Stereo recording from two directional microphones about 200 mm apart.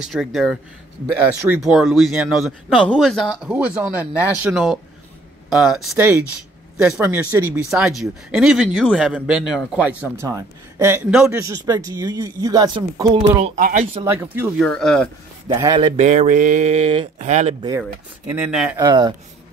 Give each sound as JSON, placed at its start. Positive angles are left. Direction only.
{"t": 0.0, "sound": "speech", "side_deg": 0}
{"t": 7.7, "sound": "speech", "side_deg": 0}
{"t": 11.3, "sound": "speech", "side_deg": -15}
{"t": 13.6, "sound": "speech", "side_deg": -40}
{"t": 14.6, "sound": "speech", "side_deg": 5}
{"t": 15.4, "sound": "a man's voice", "side_deg": -20}
{"t": 16.0, "sound": "speech", "side_deg": -35}
{"t": 17.6, "sound": "speech", "side_deg": -10}
{"t": 18.8, "sound": "a man's voice", "side_deg": -20}